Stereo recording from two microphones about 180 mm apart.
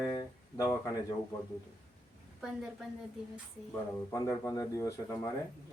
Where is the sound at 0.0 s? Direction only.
20° left (ahead or behind).